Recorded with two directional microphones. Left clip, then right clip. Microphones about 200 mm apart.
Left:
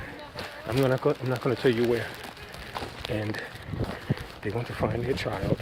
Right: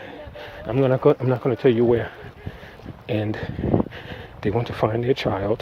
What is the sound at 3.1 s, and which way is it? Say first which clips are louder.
Speech: right 7 dB; 30° right (ahead or behind).